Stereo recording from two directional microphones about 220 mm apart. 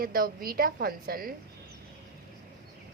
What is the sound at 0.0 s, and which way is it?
A woman's voice, 40° right (ahead or behind).